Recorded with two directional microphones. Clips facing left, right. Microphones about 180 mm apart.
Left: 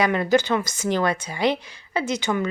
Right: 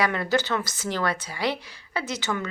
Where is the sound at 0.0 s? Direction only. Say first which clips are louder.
Left 5 dB; 20° left (ahead or behind).